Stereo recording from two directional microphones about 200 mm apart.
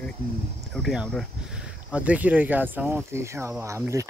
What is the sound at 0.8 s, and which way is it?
Speech, centre (ahead or behind).